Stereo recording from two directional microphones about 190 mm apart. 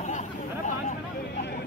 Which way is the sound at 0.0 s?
40° left (ahead or behind).